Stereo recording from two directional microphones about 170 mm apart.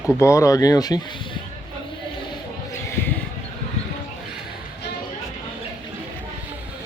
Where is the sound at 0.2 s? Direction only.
15° left (ahead or behind).